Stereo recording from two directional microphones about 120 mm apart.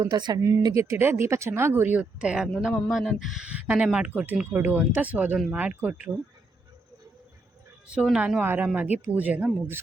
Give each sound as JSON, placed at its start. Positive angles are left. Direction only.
{"t": 0.0, "sound": "speech", "side_deg": -35}
{"t": 7.9, "sound": "speech", "side_deg": -5}